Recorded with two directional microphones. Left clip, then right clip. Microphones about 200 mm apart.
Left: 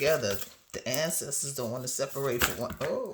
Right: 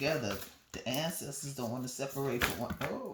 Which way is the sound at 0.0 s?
50° left (ahead or behind).